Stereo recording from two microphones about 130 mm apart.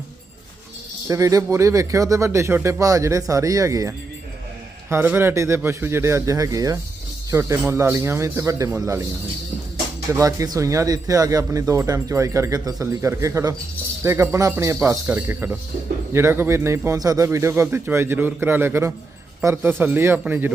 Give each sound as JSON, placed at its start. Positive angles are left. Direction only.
{"t": 1.0, "sound": "speech", "side_deg": -25}
{"t": 10.1, "sound": "a man's voice", "side_deg": -25}